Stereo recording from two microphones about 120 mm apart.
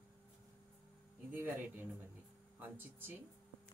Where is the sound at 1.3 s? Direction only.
15° right (ahead or behind).